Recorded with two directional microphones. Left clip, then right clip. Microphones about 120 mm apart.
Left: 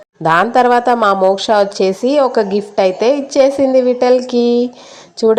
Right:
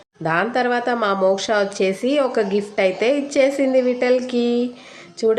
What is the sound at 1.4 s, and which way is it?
A woman's voice, 35° left (ahead or behind).